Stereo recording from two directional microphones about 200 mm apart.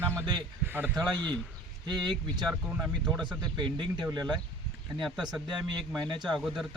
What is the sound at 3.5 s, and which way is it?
Speech, 20° right (ahead or behind).